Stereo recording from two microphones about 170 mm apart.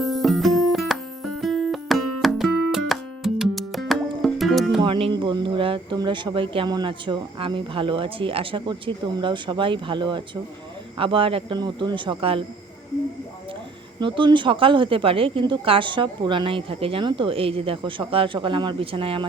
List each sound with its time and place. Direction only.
0.0 s music: centre (ahead or behind)
4.8 s speech: 30° right (ahead or behind)
14.0 s speech: 30° right (ahead or behind)